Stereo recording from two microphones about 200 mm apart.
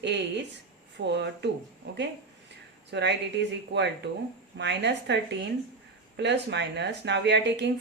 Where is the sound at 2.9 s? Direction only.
60° right (ahead or behind).